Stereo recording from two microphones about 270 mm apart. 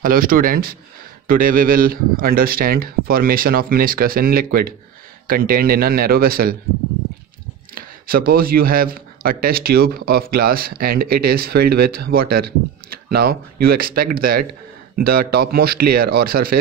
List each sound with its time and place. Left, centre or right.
0.0 s a man's voice: right
7.7 s a man's voice: right